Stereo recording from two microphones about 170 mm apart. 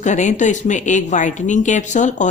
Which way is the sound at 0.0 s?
45° left (ahead or behind).